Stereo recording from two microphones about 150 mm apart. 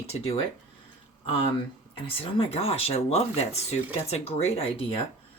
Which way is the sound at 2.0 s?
40° left (ahead or behind).